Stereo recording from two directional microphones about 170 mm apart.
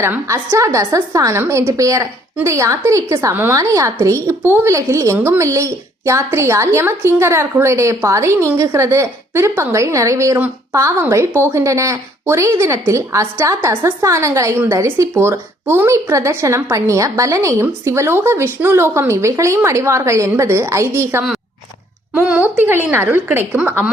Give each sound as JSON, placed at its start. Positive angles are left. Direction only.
{"t": 0.0, "sound": "a woman's voice", "side_deg": -10}